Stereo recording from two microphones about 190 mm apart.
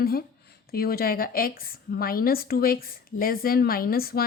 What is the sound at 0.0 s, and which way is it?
A woman's voice, 55° left (ahead or behind).